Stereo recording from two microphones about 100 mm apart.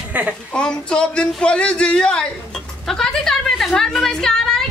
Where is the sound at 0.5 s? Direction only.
10° left (ahead or behind).